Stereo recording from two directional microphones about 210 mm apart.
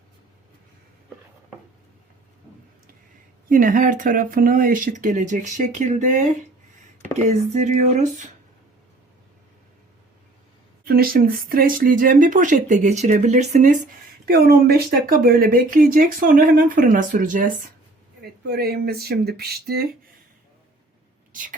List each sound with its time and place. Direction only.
3.5 s speech: 40° right (ahead or behind)
7.3 s speech: 35° right (ahead or behind)
10.8 s speech: 45° right (ahead or behind)
14.3 s speech: 45° right (ahead or behind)
18.2 s speech: 50° right (ahead or behind)
21.3 s speech: 40° right (ahead or behind)